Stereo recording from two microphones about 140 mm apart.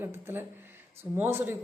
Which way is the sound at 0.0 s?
15° right (ahead or behind).